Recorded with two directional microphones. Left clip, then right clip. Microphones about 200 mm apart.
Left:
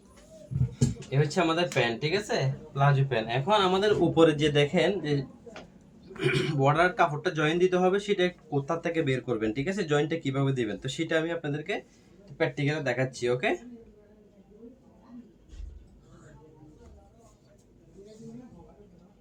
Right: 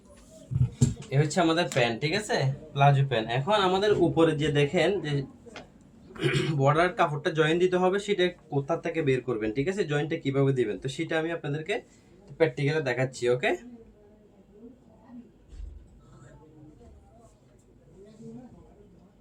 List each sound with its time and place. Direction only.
1.1 s speech: 15° right (ahead or behind)
4.1 s speech: 10° left (ahead or behind)
6.1 s speech: 10° right (ahead or behind)